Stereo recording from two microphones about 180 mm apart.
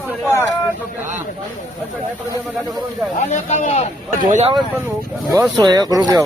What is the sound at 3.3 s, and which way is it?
Speech, 40° left (ahead or behind).